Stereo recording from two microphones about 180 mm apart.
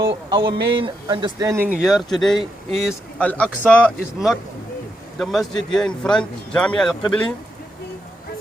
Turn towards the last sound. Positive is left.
turn(degrees=5)  # may be behind; listen again after turning